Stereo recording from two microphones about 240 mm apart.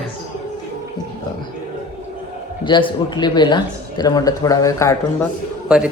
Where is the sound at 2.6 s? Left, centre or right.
Left.